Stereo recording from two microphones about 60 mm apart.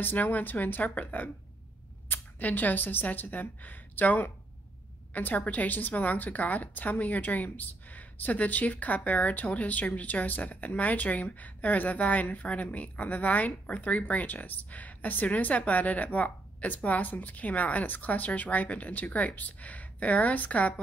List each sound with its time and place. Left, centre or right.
0.0 s a woman's voice: left